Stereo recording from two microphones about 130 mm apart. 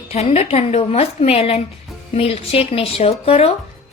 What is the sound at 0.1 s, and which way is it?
A woman's voice, 55° left (ahead or behind).